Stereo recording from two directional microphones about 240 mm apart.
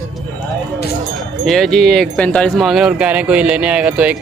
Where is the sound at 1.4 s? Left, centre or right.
Centre.